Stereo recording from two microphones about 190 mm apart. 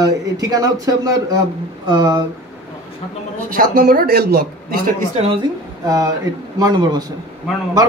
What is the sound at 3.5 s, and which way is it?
A man's voice, 45° right (ahead or behind).